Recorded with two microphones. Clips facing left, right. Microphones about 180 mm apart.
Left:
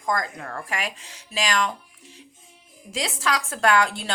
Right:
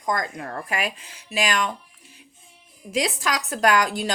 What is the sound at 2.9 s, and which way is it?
Speech, 20° right (ahead or behind).